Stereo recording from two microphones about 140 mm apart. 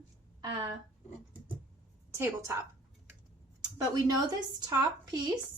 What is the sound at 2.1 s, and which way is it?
Speech, 20° right (ahead or behind).